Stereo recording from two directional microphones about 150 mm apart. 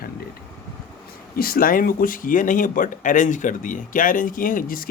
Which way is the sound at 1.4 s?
75° left (ahead or behind).